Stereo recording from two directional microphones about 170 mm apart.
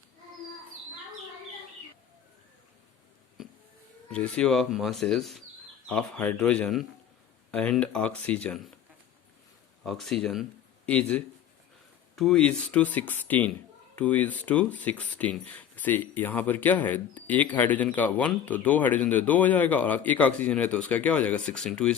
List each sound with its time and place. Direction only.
4.1 s speech: 5° left (ahead or behind)
9.8 s speech: centre (ahead or behind)